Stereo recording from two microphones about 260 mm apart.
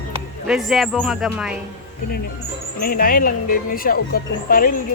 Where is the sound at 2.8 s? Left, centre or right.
Left.